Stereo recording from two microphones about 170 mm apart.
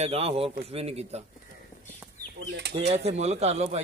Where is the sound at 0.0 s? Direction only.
35° right (ahead or behind).